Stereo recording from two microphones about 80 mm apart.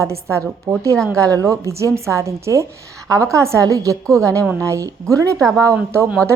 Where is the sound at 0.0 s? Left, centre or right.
Right.